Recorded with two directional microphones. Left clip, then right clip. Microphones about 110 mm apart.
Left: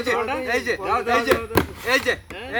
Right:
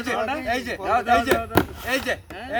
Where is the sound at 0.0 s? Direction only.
45° right (ahead or behind).